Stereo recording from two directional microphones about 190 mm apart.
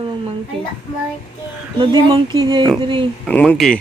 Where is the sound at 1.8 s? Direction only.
25° right (ahead or behind).